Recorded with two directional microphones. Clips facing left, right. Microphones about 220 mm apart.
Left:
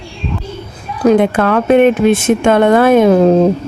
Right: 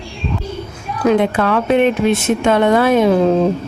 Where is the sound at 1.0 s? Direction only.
50° left (ahead or behind).